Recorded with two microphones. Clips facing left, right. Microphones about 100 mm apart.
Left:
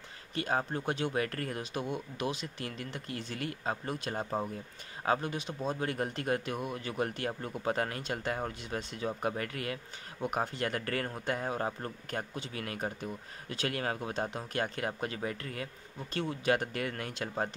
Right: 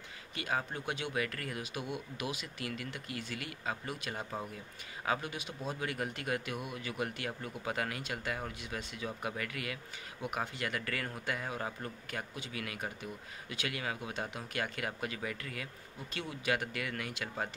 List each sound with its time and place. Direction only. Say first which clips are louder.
0.3 s a man's voice: left 4 dB; 35° left (ahead or behind)